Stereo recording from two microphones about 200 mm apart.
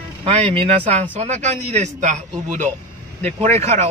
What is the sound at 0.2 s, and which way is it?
A man's voice, 30° right (ahead or behind).